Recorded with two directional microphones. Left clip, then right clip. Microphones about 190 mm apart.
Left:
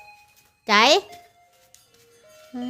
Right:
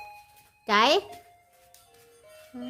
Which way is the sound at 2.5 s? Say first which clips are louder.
Left 7 dB; 35° left (ahead or behind).